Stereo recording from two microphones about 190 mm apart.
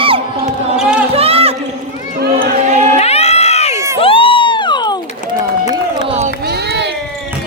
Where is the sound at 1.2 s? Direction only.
30° right (ahead or behind).